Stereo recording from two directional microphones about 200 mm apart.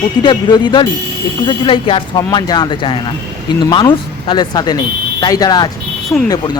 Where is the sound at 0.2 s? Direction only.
20° left (ahead or behind).